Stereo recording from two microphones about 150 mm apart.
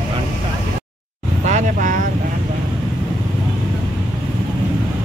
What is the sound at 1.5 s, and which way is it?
Vehicle, 55° right (ahead or behind).